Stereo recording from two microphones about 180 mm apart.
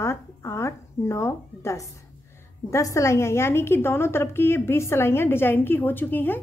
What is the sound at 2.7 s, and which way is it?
A woman's voice, 15° left (ahead or behind).